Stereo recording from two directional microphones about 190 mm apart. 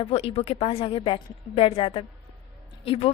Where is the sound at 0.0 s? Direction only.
30° left (ahead or behind).